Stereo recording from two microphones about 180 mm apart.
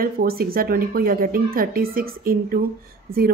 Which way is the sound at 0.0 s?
55° right (ahead or behind).